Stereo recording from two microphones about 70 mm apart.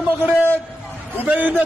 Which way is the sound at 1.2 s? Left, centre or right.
Centre.